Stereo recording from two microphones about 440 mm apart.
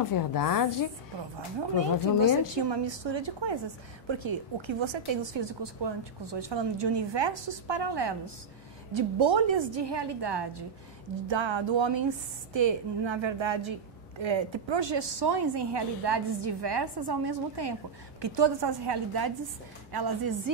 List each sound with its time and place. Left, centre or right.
0.1 s a woman's voice: left
2.2 s a woman's voice: right
8.9 s a woman's voice: right
11.2 s a woman's voice: right